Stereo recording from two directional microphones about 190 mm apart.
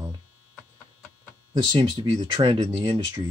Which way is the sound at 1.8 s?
25° right (ahead or behind).